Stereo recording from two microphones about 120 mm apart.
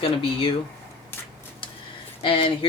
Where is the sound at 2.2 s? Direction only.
50° left (ahead or behind).